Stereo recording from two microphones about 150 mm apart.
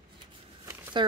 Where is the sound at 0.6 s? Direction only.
15° right (ahead or behind).